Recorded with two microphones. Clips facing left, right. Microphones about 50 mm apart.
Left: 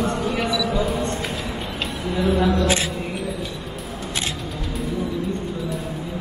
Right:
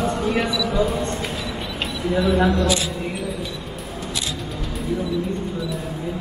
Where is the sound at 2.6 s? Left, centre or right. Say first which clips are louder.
Even; left.